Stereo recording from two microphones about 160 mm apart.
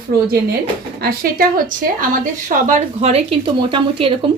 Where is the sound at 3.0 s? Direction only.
40° right (ahead or behind).